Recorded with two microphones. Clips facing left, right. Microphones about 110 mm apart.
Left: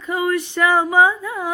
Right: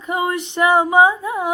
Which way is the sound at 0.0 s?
20° right (ahead or behind).